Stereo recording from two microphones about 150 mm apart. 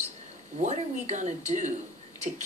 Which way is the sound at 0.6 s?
55° right (ahead or behind).